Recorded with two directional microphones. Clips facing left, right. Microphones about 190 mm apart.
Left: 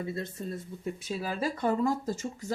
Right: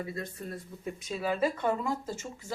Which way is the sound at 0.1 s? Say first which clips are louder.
Left 3 dB; 25° left (ahead or behind).